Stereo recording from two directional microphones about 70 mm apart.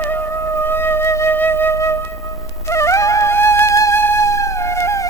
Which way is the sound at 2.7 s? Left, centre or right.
Left.